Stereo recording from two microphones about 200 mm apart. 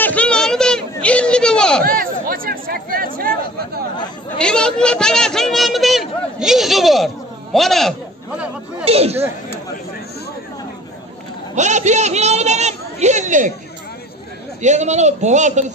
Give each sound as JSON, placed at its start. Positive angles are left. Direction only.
{"t": 0.0, "sound": "a sound", "side_deg": 5}
{"t": 1.9, "sound": "chatter", "side_deg": -45}
{"t": 4.4, "sound": "a sound", "side_deg": 5}
{"t": 7.5, "sound": "a man's voice", "side_deg": 0}
{"t": 8.8, "sound": "speech", "side_deg": -30}
{"t": 11.5, "sound": "a man's voice", "side_deg": -35}
{"t": 14.6, "sound": "a man's voice", "side_deg": -35}